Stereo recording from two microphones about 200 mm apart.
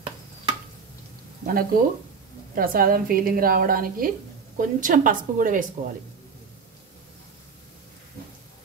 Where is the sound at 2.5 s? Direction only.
45° right (ahead or behind).